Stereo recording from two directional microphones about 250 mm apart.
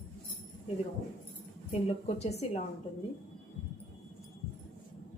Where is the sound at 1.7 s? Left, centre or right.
Left.